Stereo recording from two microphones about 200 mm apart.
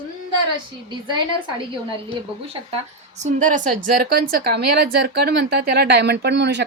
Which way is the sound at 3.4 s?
40° right (ahead or behind).